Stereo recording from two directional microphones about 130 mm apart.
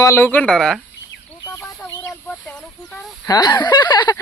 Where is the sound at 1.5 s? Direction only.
20° left (ahead or behind).